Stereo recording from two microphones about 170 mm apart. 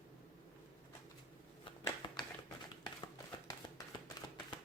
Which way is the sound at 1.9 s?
25° left (ahead or behind).